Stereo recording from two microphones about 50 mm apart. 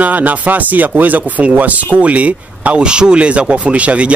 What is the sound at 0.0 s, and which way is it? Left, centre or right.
Speech, right.